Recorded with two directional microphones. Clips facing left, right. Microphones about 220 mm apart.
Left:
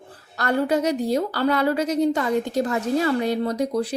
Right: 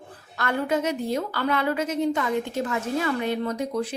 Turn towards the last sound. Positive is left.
turn(degrees=35)  # may be behind; listen again after turning